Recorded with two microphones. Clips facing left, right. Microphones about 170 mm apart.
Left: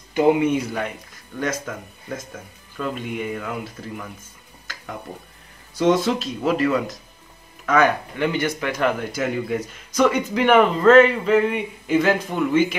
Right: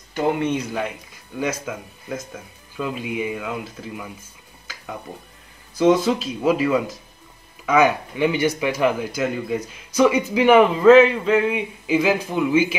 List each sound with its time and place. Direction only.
0.1 s speech: 10° left (ahead or behind); by 4.1 s 5° right (ahead or behind)
5.8 s speech: 5° right (ahead or behind)